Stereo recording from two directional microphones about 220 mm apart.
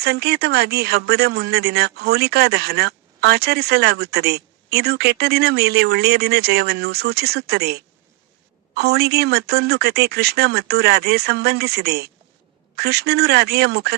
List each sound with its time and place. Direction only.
0.0 s speech: 45° right (ahead or behind)